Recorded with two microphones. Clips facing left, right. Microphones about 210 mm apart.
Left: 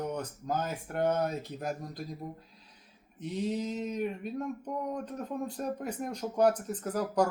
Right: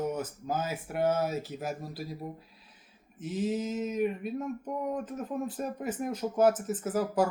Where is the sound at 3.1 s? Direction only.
5° right (ahead or behind).